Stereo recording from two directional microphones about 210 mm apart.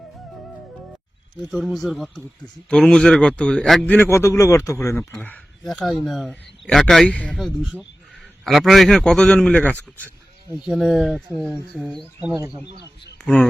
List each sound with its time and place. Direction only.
1.5 s speech: centre (ahead or behind)
12.5 s speech: 35° right (ahead or behind)
13.2 s speech: 5° left (ahead or behind)